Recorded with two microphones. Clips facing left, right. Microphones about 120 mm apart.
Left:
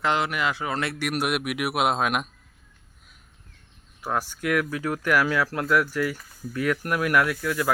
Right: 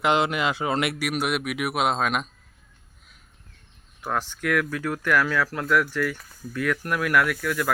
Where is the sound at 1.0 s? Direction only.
Centre (ahead or behind).